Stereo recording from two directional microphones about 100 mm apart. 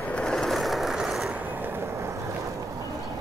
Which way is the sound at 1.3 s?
20° right (ahead or behind).